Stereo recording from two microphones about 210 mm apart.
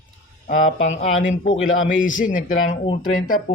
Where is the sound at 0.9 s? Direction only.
30° left (ahead or behind).